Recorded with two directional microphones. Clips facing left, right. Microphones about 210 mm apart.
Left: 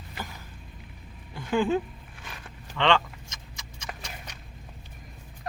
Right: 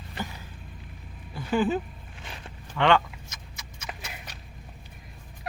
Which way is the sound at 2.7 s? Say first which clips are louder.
Right 2 dB; 5° right (ahead or behind).